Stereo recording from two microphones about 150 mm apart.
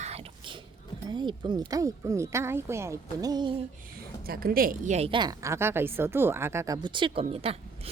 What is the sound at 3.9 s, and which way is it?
A woman's voice, 80° right.